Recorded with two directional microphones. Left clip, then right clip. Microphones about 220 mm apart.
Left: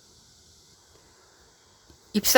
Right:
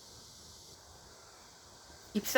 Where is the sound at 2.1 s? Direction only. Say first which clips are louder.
Left 12 dB; 50° left (ahead or behind).